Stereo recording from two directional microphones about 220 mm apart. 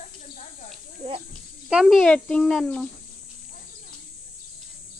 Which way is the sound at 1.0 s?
30° right (ahead or behind).